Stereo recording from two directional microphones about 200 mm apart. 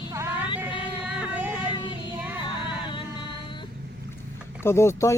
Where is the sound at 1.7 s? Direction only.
20° left (ahead or behind).